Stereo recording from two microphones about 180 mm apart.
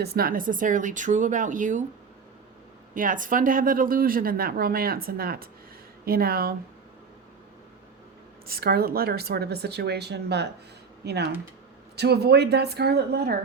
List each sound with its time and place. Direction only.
0.0 s speech: 60° right (ahead or behind)
2.9 s speech: 50° right (ahead or behind)
8.4 s speech: 55° right (ahead or behind)